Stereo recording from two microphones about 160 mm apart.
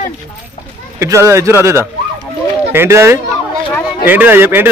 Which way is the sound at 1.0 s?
20° right (ahead or behind).